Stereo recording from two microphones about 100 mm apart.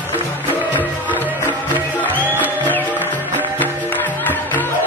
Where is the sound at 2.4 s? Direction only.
15° left (ahead or behind).